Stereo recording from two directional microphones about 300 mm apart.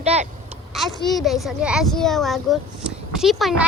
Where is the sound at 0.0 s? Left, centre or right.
Right.